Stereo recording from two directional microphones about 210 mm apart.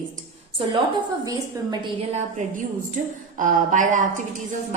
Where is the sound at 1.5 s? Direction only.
15° right (ahead or behind).